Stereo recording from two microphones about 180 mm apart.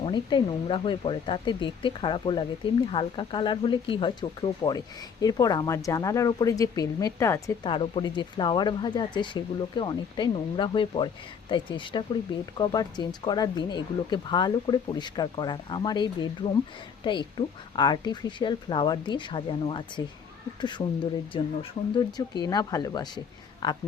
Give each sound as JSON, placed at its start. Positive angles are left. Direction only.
{"t": 0.0, "sound": "speech", "side_deg": 25}
{"t": 7.7, "sound": "speech", "side_deg": 30}